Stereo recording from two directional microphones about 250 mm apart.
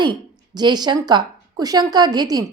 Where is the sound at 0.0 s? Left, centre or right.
Centre.